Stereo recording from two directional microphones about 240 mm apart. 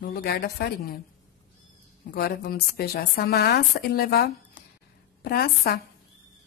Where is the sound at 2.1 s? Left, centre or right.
Left.